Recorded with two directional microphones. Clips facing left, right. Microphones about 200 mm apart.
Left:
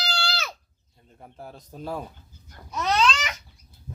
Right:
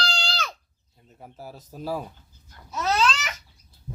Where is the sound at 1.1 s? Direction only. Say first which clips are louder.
Right 1 dB; 5° right (ahead or behind).